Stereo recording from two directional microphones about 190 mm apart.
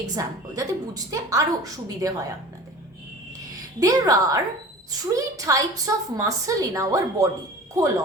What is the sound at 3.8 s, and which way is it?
A woman's voice, 20° right (ahead or behind).